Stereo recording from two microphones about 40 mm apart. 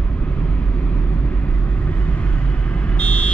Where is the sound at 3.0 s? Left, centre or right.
Left.